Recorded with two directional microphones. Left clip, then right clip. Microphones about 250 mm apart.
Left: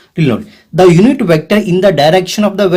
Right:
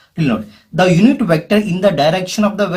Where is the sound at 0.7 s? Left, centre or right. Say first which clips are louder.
Left 5 dB; left.